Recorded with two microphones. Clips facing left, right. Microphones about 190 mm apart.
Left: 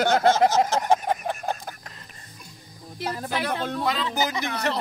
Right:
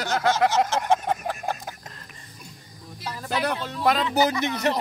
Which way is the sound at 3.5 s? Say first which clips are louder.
Left 5 dB; 55° left (ahead or behind).